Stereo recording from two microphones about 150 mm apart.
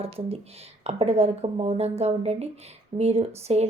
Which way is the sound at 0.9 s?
45° right (ahead or behind).